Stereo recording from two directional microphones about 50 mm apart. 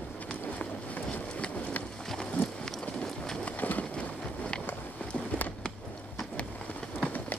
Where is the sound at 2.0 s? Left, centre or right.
Centre.